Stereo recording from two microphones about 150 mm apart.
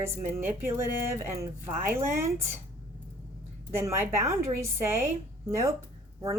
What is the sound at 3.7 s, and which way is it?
Speech, 20° right (ahead or behind).